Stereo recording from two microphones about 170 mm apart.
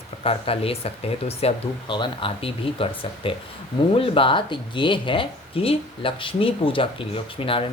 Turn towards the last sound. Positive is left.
turn(degrees=30)  # may be behind; listen again after turning